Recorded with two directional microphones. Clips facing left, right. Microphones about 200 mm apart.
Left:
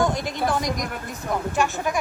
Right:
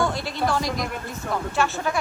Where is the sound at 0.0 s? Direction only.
15° left (ahead or behind).